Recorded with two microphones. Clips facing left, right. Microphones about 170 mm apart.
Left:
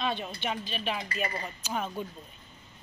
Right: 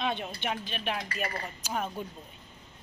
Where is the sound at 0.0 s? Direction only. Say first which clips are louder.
Even; 20° right (ahead or behind).